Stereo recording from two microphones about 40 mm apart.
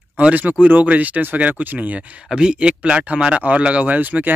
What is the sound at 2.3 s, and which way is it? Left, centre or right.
Speech, right.